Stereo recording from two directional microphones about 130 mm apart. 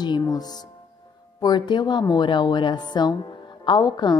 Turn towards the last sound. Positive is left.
turn(degrees=35)  # may be behind; listen again after turning